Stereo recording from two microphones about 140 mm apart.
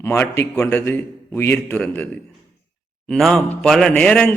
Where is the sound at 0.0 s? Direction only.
15° left (ahead or behind).